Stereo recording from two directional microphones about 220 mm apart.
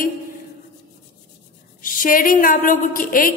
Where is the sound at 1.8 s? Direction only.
40° left (ahead or behind).